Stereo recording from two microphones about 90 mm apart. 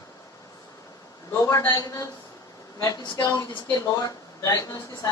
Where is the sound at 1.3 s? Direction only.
30° left (ahead or behind).